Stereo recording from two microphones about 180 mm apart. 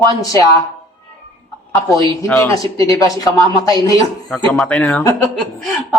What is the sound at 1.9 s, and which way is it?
Speech, 20° left (ahead or behind).